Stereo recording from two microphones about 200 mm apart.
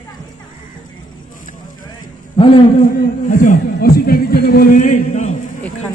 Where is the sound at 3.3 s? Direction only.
45° left (ahead or behind).